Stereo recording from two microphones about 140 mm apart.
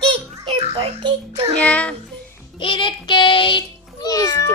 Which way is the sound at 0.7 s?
40° right (ahead or behind).